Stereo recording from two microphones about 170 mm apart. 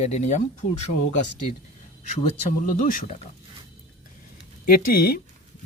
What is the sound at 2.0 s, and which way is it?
Speech, 45° left (ahead or behind).